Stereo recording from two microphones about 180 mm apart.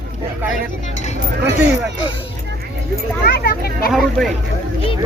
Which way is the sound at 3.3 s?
60° left (ahead or behind).